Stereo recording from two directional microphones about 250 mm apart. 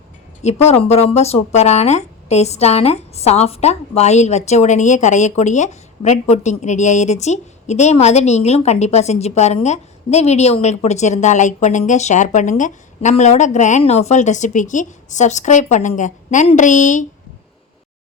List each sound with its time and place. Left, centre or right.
0.4 s speech: left